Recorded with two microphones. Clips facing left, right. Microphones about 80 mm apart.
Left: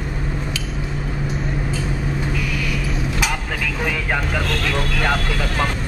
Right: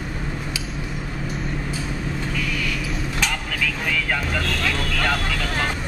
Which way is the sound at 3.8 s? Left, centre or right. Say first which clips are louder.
Left 3 dB; left.